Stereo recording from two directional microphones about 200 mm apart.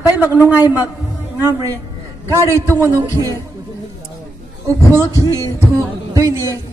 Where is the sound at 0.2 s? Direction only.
10° right (ahead or behind).